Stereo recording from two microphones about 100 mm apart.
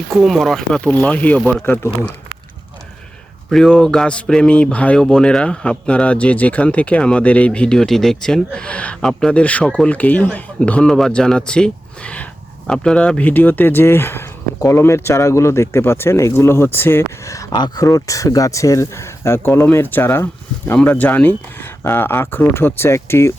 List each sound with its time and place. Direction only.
0.1 s speech: centre (ahead or behind)
0.9 s speech: 15° left (ahead or behind)
1.4 s speech: 5° left (ahead or behind)
1.6 s speech: 20° left (ahead or behind)
3.5 s speech: 5° left (ahead or behind); by 17.5 s 30° left (ahead or behind)
17.5 s speech: 45° left (ahead or behind)
17.8 s speech: 35° left (ahead or behind)